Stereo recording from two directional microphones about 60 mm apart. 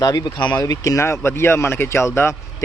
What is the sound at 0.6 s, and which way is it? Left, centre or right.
Speech, left.